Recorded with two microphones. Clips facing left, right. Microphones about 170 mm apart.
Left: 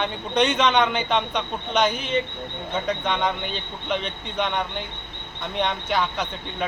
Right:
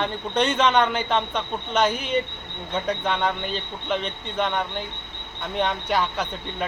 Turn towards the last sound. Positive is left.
turn(degrees=-5)  # may be behind; listen again after turning